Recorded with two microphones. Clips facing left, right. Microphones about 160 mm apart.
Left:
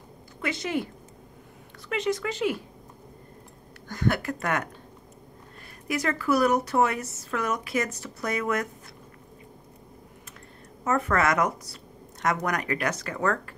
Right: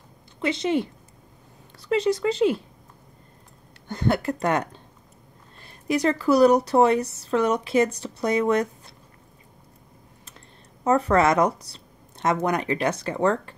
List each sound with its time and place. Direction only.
0.4 s speech: 25° right (ahead or behind)
1.9 s speech: 35° right (ahead or behind)
3.9 s speech: 25° right (ahead or behind)
5.9 s speech: 30° right (ahead or behind)
10.8 s speech: 30° right (ahead or behind)